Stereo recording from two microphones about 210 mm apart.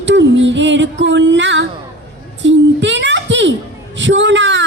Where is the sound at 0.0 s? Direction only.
60° right (ahead or behind).